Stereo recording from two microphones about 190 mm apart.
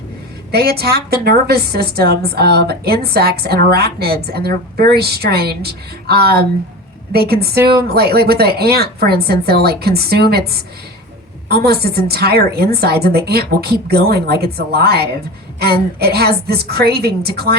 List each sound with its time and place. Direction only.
0.5 s a woman's voice: 55° right (ahead or behind)